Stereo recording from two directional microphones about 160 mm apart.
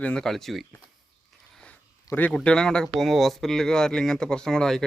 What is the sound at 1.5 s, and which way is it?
Biting, 5° left (ahead or behind).